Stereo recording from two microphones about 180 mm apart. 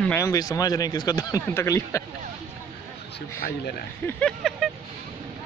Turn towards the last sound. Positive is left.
turn(degrees=0)  # may be behind; listen again after turning